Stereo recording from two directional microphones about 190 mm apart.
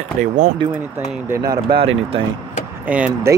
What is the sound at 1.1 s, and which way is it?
Speech, 10° right (ahead or behind).